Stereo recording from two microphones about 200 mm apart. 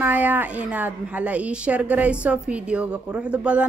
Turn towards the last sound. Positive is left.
turn(degrees=-5)  # may be behind; listen again after turning